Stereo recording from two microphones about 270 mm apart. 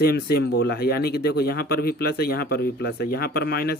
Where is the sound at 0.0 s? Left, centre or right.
Left.